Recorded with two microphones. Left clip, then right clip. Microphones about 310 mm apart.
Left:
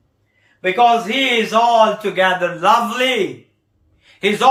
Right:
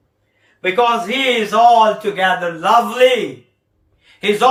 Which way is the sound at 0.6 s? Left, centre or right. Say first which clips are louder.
Left 1 dB; centre.